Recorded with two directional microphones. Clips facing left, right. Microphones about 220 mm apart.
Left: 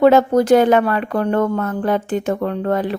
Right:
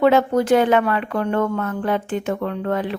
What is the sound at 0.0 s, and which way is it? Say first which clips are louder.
Speech: left 4 dB; 40° left (ahead or behind).